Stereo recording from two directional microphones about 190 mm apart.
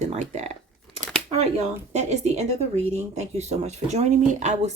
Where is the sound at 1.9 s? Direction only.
35° right (ahead or behind).